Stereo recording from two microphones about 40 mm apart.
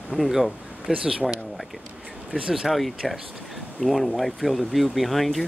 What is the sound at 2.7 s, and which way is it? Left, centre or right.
Speech, centre.